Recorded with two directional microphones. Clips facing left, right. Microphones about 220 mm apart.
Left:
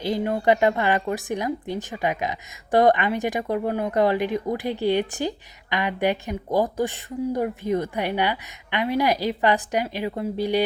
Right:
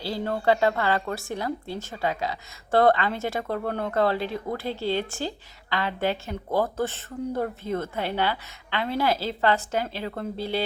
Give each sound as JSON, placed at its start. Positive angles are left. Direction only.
{"t": 0.0, "sound": "speech", "side_deg": 15}